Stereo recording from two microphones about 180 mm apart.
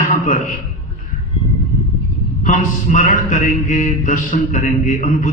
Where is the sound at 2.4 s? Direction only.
45° left (ahead or behind).